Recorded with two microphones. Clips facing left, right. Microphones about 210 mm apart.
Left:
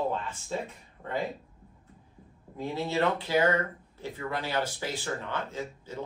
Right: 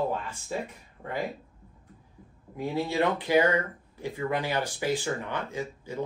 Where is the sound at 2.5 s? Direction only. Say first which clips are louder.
Right 2 dB; 15° right (ahead or behind).